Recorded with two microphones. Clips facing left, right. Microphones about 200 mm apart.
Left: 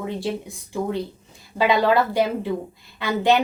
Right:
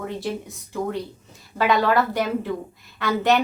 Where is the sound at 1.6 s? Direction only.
15° left (ahead or behind).